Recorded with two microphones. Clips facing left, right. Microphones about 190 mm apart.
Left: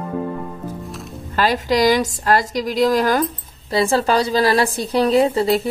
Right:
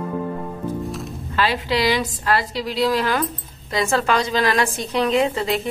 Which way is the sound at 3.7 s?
30° left (ahead or behind).